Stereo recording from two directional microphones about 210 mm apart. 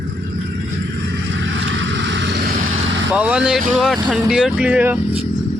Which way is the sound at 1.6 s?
60° right (ahead or behind).